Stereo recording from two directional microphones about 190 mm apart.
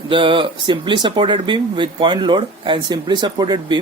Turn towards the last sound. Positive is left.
turn(degrees=-20)  # may be behind; listen again after turning